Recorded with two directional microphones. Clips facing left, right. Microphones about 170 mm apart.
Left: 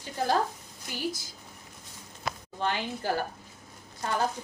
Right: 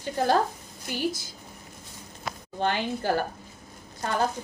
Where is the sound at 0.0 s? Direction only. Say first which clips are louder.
Right 4 dB; 60° right (ahead or behind).